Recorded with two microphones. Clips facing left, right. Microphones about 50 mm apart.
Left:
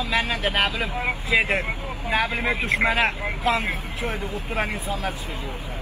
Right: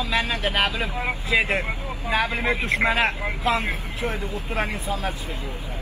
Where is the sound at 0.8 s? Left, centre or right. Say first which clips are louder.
Left 1 dB; left.